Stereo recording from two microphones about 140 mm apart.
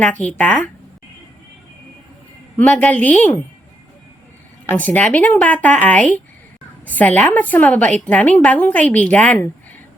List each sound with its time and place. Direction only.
0.0 s a woman's voice: 10° left (ahead or behind)
2.6 s a woman's voice: 10° left (ahead or behind)
4.7 s a woman's voice: 10° left (ahead or behind)